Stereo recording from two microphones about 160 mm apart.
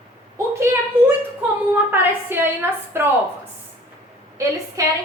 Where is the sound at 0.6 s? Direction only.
15° right (ahead or behind).